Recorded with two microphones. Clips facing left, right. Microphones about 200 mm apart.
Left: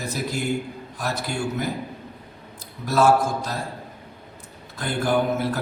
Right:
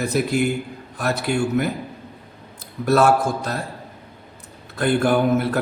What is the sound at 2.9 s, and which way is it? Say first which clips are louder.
Speech: right 2 dB; 60° right (ahead or behind).